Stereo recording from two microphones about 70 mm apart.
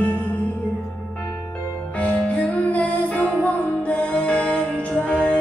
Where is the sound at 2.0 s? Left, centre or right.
Centre.